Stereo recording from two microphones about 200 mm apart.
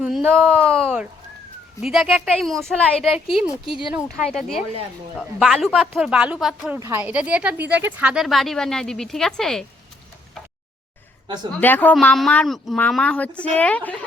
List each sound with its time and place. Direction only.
0.0 s a sound: 5° right (ahead or behind)
0.6 s speech: 5° left (ahead or behind)
3.5 s speech: 25° left (ahead or behind)
3.9 s speech: centre (ahead or behind)
6.7 s speech: 15° right (ahead or behind); by 9.6 s centre (ahead or behind)
11.6 s speech: 10° left (ahead or behind)